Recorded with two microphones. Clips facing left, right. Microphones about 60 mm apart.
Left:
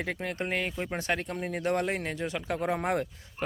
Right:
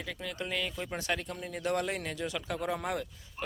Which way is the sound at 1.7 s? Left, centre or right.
Left.